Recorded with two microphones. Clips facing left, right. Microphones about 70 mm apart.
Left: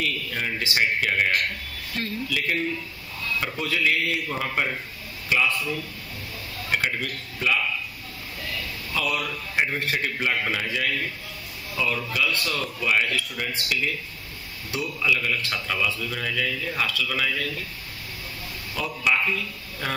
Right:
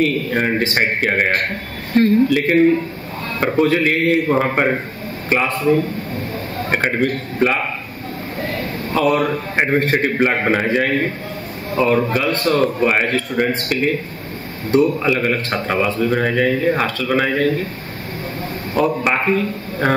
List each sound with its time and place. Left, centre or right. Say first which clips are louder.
0.0 s a man's voice: right 11 dB; right
18.8 s a man's voice: right 8 dB; right